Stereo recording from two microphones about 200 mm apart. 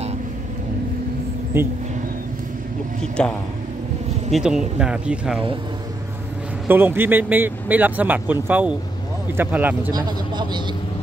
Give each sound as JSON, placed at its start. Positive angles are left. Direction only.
{"t": 1.5, "sound": "speech", "side_deg": -10}
{"t": 3.2, "sound": "speech", "side_deg": 5}
{"t": 6.7, "sound": "speech", "side_deg": -10}
{"t": 9.9, "sound": "vehicle", "side_deg": -20}